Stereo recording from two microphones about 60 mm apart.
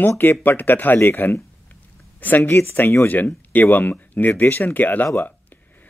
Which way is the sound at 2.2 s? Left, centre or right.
Left.